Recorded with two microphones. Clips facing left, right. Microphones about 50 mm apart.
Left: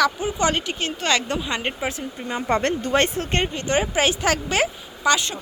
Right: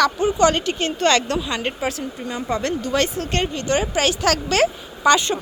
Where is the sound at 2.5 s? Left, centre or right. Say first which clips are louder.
Left 2 dB; left; by 4.7 s centre.